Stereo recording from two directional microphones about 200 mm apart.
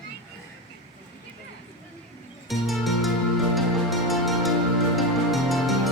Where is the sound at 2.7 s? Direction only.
Centre (ahead or behind).